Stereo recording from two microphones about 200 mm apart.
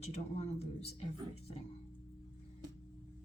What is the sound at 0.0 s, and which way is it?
Speech, 30° left (ahead or behind).